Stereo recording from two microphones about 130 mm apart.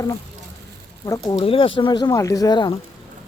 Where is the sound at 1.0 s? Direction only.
20° left (ahead or behind).